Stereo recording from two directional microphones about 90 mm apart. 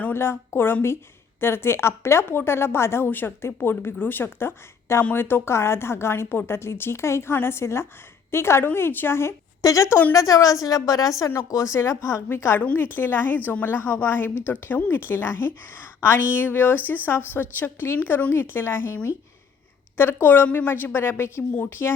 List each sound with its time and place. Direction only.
0.0 s a woman's voice: 25° left (ahead or behind)
20.0 s a woman's voice: 25° left (ahead or behind)